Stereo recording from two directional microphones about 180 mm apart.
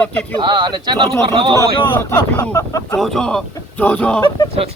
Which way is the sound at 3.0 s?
Centre (ahead or behind).